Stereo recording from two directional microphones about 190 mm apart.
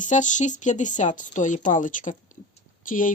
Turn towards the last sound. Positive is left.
turn(degrees=45)  # may be behind; listen again after turning